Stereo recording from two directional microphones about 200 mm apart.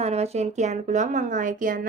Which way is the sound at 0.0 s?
30° right (ahead or behind).